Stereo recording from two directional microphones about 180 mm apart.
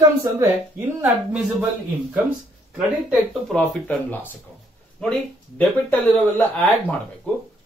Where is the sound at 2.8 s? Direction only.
Centre (ahead or behind).